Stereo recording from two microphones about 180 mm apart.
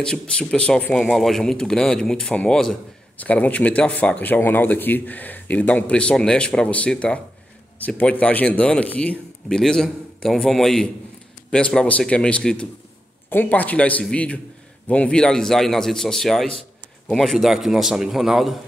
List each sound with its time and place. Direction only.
0.0 s speech: 5° left (ahead or behind)